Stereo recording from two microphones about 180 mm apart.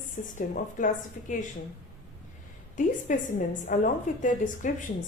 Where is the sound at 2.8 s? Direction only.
45° left (ahead or behind).